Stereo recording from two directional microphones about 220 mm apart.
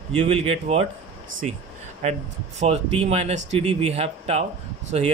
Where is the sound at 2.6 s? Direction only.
30° right (ahead or behind).